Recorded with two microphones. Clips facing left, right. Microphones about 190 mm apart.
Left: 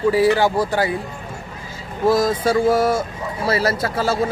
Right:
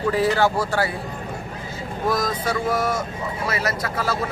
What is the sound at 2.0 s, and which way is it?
Speech, 30° left (ahead or behind).